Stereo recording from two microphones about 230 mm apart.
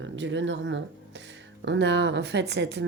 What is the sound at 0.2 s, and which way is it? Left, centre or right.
A woman's voice, right.